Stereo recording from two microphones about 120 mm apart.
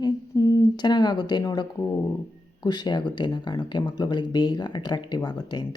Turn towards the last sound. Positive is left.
turn(degrees=35)  # may be behind; listen again after turning